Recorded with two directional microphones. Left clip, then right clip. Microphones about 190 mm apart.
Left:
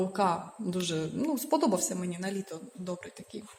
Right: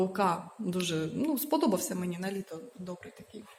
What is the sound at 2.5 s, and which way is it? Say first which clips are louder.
Speech: left 3 dB; 20° left (ahead or behind).